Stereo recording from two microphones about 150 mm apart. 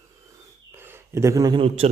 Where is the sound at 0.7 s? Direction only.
15° right (ahead or behind).